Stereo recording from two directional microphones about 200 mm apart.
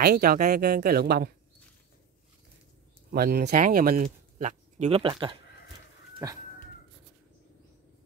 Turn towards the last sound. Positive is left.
turn(degrees=-15)  # may be behind; listen again after turning